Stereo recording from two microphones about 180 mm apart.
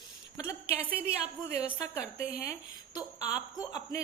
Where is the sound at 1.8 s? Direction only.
15° left (ahead or behind).